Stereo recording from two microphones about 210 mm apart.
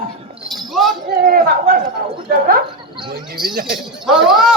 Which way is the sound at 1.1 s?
40° right (ahead or behind).